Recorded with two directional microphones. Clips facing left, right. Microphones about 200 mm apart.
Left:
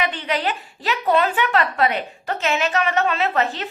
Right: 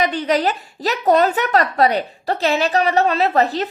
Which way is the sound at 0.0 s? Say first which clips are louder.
Right 6 dB; 40° right (ahead or behind).